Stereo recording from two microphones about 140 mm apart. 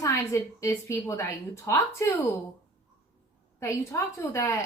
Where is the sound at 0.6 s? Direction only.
20° left (ahead or behind).